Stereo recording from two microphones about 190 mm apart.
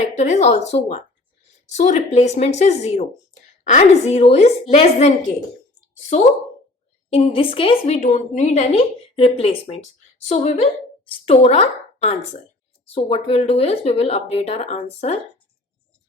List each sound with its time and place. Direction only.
0.0 s a woman's voice: 40° left (ahead or behind)